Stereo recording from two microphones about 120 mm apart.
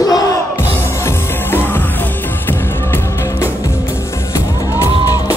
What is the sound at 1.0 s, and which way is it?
Music, 20° left (ahead or behind).